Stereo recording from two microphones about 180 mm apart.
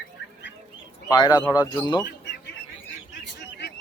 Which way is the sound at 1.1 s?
20° left (ahead or behind).